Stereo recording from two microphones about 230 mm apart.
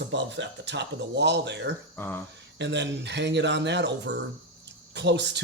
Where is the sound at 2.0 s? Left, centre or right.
Centre.